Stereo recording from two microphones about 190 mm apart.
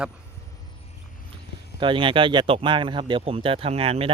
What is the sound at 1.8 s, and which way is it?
Speech, 25° right (ahead or behind).